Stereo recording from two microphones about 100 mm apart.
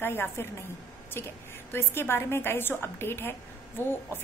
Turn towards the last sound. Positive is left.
turn(degrees=20)  # may be behind; listen again after turning